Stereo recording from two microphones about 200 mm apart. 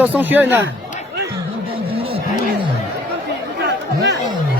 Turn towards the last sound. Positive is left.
turn(degrees=-55)  # may be behind; listen again after turning